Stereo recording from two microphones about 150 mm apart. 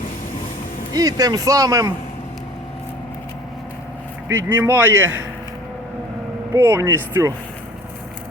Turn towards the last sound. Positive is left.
turn(degrees=-20)  # may be behind; listen again after turning